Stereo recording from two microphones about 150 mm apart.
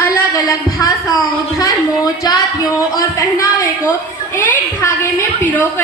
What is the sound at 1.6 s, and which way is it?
A woman's voice, 25° left (ahead or behind).